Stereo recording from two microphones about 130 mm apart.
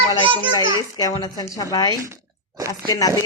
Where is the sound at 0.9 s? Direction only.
30° left (ahead or behind).